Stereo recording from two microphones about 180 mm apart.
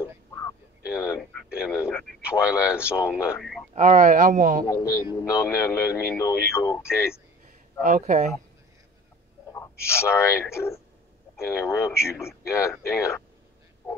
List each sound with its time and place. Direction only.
0.9 s a sound: 15° left (ahead or behind)
1.4 s radio: 5° right (ahead or behind)
1.9 s speech: centre (ahead or behind)
3.3 s a sound: centre (ahead or behind)
3.7 s speech: 40° right (ahead or behind)
4.6 s speech: 20° left (ahead or behind)
7.8 s speech: 45° right (ahead or behind)
9.5 s speech: 15° left (ahead or behind)